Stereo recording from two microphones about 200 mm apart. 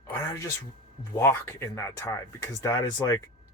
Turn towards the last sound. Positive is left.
turn(degrees=15)  # may be behind; listen again after turning